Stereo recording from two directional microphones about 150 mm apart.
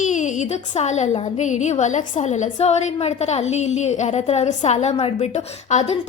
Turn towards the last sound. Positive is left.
turn(degrees=50)  # may be behind; listen again after turning